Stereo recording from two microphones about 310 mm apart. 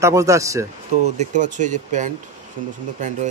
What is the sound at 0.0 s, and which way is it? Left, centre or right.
Speech, centre.